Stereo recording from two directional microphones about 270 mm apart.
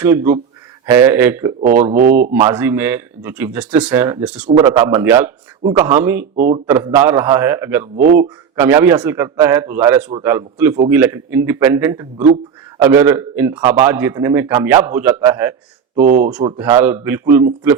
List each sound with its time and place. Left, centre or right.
0.0 s a man's voice: centre
1.6 s speech: right
2.3 s a man's voice: centre
6.3 s speech: right
6.7 s a man's voice: centre
16.0 s speech: right
16.4 s a man's voice: centre